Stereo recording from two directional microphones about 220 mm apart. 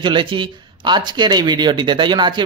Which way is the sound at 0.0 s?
20° right (ahead or behind).